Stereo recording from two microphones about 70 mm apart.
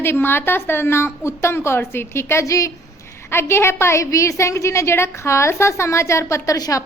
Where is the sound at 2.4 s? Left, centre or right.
Left.